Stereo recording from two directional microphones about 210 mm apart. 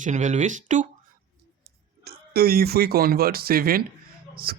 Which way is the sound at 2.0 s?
50° right (ahead or behind).